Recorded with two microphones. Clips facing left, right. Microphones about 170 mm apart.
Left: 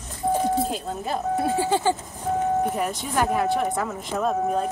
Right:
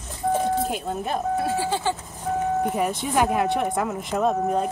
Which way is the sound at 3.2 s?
10° right (ahead or behind).